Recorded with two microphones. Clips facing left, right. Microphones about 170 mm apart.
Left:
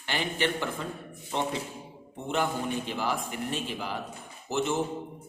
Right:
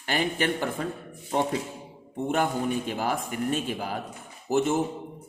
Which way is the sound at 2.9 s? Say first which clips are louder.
Right 2 dB; 50° right (ahead or behind).